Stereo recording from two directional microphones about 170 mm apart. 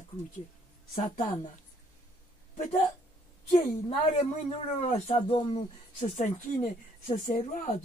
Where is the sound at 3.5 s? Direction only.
40° left (ahead or behind).